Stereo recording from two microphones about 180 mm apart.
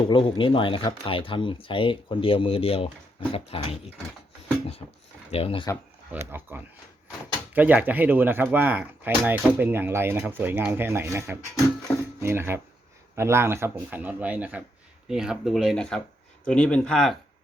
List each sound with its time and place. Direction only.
0.1 s speech: 30° left (ahead or behind)
5.3 s speech: 30° left (ahead or behind)
6.1 s speech: 10° right (ahead or behind)